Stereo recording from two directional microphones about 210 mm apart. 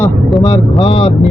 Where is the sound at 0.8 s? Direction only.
30° left (ahead or behind).